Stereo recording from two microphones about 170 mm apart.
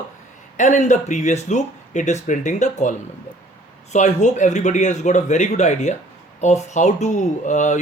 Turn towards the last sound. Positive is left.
turn(degrees=45)  # may be behind; listen again after turning